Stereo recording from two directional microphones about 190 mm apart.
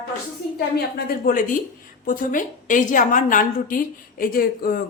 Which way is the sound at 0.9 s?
50° left (ahead or behind).